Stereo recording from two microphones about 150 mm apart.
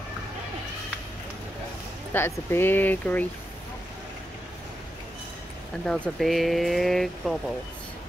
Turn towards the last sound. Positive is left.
turn(degrees=0)  # may be behind; listen again after turning